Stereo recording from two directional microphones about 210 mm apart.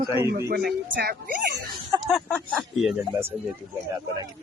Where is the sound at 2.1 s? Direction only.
5° left (ahead or behind).